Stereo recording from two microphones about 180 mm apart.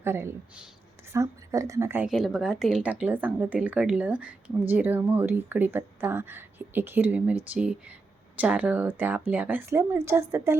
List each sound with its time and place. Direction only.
0.0 s speech: 15° right (ahead or behind)
2.0 s speech: centre (ahead or behind)